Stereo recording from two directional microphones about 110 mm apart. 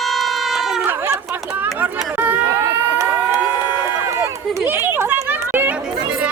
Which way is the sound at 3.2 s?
15° right (ahead or behind).